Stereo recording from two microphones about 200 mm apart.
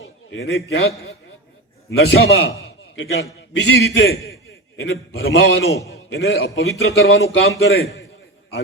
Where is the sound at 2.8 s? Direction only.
65° left (ahead or behind).